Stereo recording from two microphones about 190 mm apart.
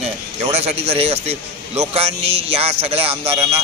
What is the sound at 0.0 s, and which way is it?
A man's voice, 35° right (ahead or behind).